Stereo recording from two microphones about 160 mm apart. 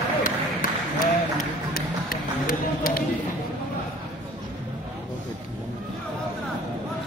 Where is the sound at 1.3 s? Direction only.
60° left (ahead or behind).